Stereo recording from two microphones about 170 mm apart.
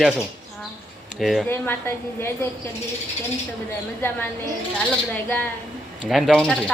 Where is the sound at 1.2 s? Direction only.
Centre (ahead or behind).